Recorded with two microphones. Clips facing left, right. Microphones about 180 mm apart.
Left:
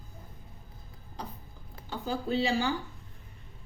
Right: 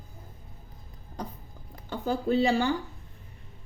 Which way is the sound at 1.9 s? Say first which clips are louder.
Right 5 dB; 55° right (ahead or behind).